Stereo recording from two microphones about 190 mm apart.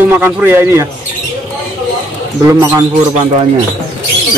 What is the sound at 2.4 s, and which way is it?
Speech, 10° right (ahead or behind).